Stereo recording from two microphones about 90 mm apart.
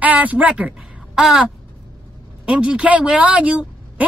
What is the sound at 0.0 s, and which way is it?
A woman's voice, 15° right (ahead or behind).